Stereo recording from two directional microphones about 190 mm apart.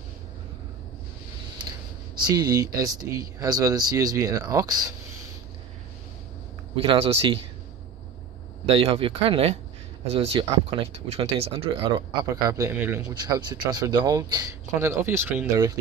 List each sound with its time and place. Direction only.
2.1 s speech: 20° right (ahead or behind)
6.7 s speech: 30° right (ahead or behind)
8.6 s speech: 30° right (ahead or behind); by 13.0 s 10° right (ahead or behind)
13.1 s speech: 20° right (ahead or behind)